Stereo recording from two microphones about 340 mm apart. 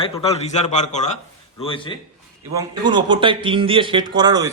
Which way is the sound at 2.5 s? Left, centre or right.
Centre.